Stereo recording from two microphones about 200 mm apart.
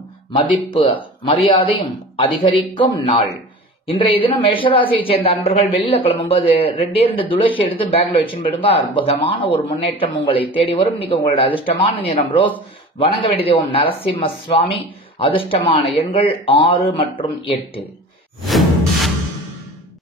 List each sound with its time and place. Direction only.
0.5 s speech: 25° left (ahead or behind)
18.4 s whoosh: centre (ahead or behind)